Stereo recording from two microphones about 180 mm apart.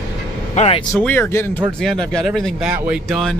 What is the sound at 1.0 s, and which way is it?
Speech, 10° left (ahead or behind).